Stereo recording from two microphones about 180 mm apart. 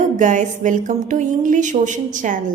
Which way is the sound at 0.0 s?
45° right (ahead or behind).